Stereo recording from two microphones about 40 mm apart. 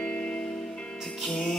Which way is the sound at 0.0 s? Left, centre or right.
Left.